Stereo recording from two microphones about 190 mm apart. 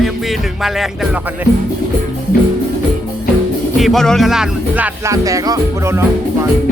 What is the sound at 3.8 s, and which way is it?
Music, centre (ahead or behind).